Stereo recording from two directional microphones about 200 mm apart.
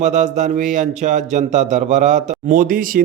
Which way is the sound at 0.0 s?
35° right (ahead or behind).